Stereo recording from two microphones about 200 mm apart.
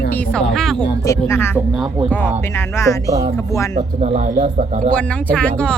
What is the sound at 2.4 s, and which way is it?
Speech, 10° left (ahead or behind).